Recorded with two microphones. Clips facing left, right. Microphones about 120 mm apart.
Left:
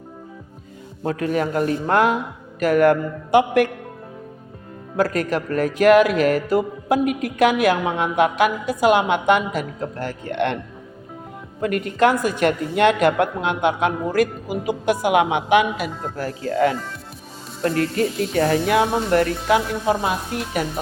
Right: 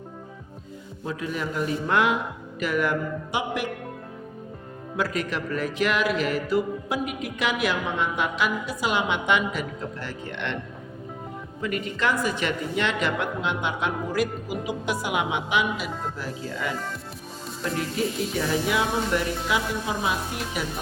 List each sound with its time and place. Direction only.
1.0 s speech: 60° left (ahead or behind)
4.9 s speech: 45° left (ahead or behind)
11.6 s speech: 55° left (ahead or behind)
17.7 s speech: centre (ahead or behind)
18.2 s speech: 65° left (ahead or behind)